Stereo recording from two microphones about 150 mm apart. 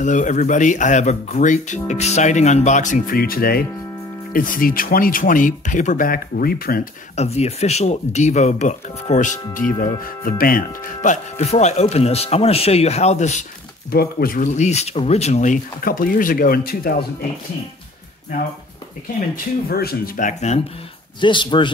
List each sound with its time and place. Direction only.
0.0 s speech: 55° left (ahead or behind); by 3.6 s 80° left
4.3 s speech: 65° left (ahead or behind)
7.2 s speech: 45° left (ahead or behind)
9.8 s speech: 70° left (ahead or behind); by 13.5 s 50° left (ahead or behind)
13.8 s speech: 85° left
14.5 s speech: 50° left (ahead or behind); by 17.0 s 80° left
19.3 s speech: 90° left; by 20.6 s 50° left (ahead or behind)
21.2 s speech: 30° left (ahead or behind)